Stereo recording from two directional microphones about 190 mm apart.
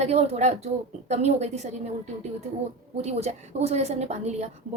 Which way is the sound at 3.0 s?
35° right (ahead or behind).